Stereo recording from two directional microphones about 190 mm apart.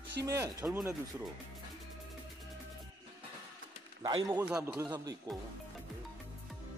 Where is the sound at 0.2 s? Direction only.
20° right (ahead or behind).